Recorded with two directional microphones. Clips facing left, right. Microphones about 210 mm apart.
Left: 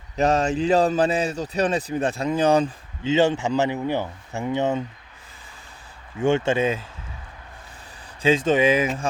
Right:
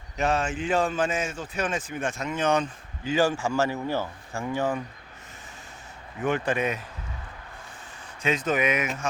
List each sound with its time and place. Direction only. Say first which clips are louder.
0.2 s a man's voice: left 6 dB; 40° left (ahead or behind); by 4.8 s 20° left (ahead or behind)
6.1 s speech: left 6 dB; 30° left (ahead or behind)
8.2 s speech: left 7 dB; 30° left (ahead or behind)